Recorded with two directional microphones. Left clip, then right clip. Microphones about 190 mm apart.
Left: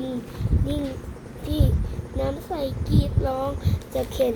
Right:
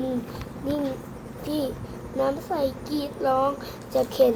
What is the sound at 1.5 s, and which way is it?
Speech, centre (ahead or behind).